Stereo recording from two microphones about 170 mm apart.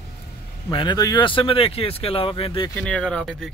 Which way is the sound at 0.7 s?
25° left (ahead or behind).